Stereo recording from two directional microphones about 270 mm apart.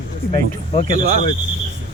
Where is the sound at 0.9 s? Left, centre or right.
Right.